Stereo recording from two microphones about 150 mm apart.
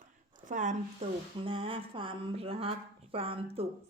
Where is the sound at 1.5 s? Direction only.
35° right (ahead or behind).